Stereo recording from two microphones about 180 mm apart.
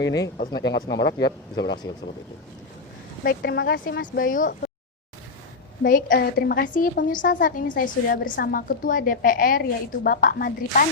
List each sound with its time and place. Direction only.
0.3 s speech: 65° left (ahead or behind)
3.2 s speech: 60° left (ahead or behind)
5.8 s a woman's voice: 50° left (ahead or behind)